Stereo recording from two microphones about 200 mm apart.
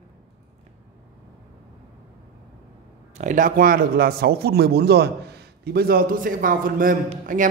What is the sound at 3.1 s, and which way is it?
A man's voice, 40° right (ahead or behind).